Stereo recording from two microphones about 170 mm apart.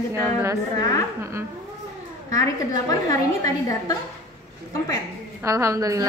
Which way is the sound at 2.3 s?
20° left (ahead or behind).